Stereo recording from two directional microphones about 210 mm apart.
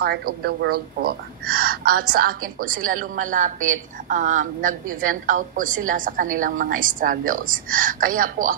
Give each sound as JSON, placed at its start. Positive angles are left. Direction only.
{"t": 0.0, "sound": "speech", "side_deg": -50}